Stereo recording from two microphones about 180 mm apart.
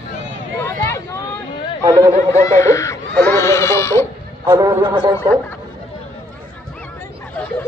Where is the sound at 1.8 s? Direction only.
15° right (ahead or behind).